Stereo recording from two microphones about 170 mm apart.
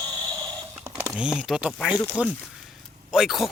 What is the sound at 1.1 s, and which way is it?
Speech, 5° right (ahead or behind).